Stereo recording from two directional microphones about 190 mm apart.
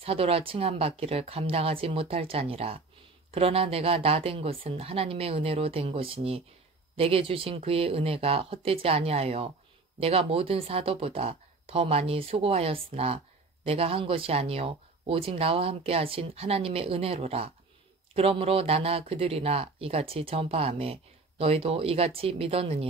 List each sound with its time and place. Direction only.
0.0 s speech: 30° right (ahead or behind)